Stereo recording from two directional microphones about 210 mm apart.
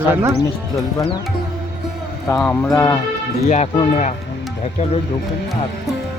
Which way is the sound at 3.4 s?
30° left (ahead or behind).